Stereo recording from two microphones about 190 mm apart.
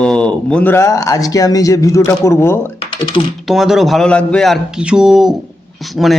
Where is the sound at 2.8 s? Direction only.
25° left (ahead or behind).